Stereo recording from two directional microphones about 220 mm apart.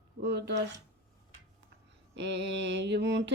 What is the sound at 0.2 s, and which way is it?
Speech, 50° right (ahead or behind).